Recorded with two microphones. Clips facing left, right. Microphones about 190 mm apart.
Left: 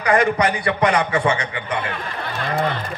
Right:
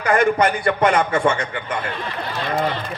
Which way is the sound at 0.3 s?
50° right (ahead or behind).